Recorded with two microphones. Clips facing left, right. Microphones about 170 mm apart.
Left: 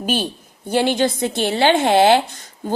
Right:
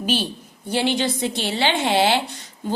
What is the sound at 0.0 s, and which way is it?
A woman's voice, 50° left (ahead or behind).